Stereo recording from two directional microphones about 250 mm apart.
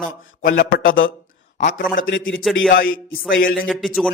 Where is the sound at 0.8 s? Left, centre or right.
Left.